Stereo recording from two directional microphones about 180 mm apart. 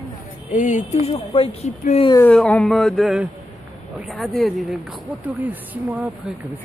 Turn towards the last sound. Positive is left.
turn(degrees=-10)  # may be behind; listen again after turning